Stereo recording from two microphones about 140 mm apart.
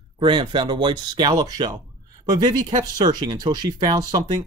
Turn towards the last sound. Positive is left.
turn(degrees=-30)  # may be behind; listen again after turning